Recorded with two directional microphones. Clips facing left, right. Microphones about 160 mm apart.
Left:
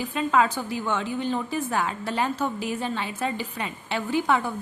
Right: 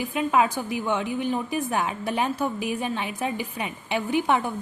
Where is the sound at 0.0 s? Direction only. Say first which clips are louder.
Even; 15° right (ahead or behind).